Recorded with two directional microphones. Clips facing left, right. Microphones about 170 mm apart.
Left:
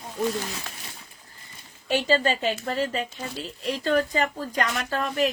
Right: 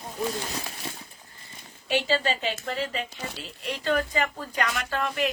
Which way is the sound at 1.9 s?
45° left (ahead or behind).